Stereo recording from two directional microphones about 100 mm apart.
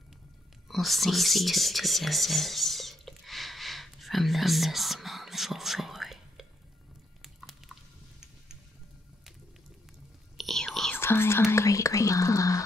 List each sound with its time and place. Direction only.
0.7 s a sound: centre (ahead or behind)
10.3 s whispering: centre (ahead or behind)
11.0 s speech: 25° left (ahead or behind)